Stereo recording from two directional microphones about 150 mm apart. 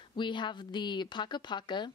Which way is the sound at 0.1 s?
30° left (ahead or behind).